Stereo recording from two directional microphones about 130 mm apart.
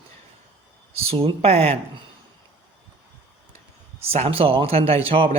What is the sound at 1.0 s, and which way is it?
Speech, 45° right (ahead or behind).